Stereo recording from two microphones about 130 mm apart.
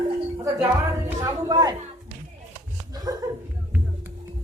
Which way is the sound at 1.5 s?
30° right (ahead or behind).